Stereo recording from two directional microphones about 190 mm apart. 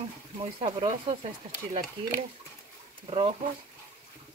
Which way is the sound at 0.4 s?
30° right (ahead or behind).